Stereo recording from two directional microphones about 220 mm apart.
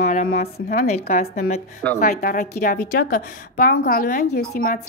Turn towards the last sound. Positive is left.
turn(degrees=40)  # may be behind; listen again after turning